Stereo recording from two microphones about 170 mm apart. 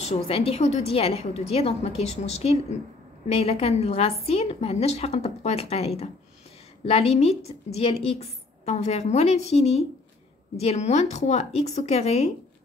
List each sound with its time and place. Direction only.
0.0 s speech: 35° left (ahead or behind)